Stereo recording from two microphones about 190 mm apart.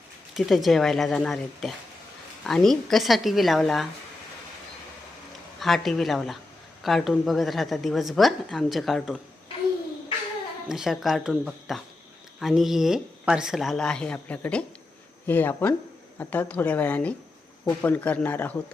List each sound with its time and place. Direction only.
0.3 s a woman's voice: centre (ahead or behind)
5.5 s a woman's voice: centre (ahead or behind)
10.7 s a woman's voice: centre (ahead or behind)